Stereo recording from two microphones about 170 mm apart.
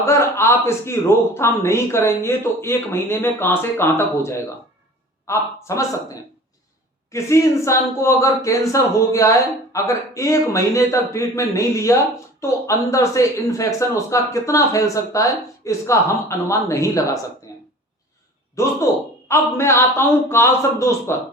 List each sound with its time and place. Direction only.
0.0 s speech: 15° left (ahead or behind)
7.1 s speech: 15° left (ahead or behind)
17.5 s a sound: 20° left (ahead or behind)
18.6 s speech: 15° left (ahead or behind)